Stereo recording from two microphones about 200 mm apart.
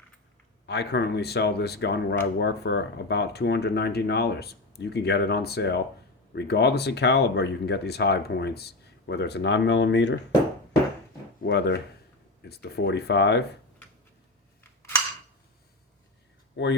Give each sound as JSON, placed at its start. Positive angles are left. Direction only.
{"t": 0.7, "sound": "speech", "side_deg": 55}
{"t": 11.4, "sound": "speech", "side_deg": 60}
{"t": 16.6, "sound": "speech", "side_deg": 60}